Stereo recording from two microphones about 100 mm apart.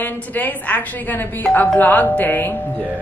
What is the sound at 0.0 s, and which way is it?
A woman's voice, 20° left (ahead or behind).